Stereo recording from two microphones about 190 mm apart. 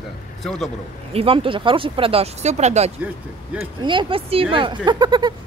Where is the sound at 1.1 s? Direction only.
30° right (ahead or behind).